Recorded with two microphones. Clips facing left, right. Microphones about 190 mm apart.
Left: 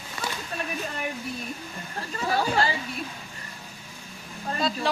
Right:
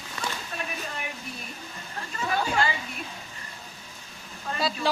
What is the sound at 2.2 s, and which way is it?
Chatter, 35° left (ahead or behind).